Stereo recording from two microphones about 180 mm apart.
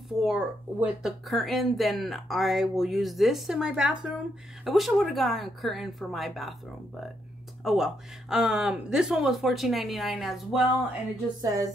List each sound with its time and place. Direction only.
0.2 s speech: 5° right (ahead or behind)
7.6 s speech: centre (ahead or behind)
11.4 s a sound: 20° right (ahead or behind)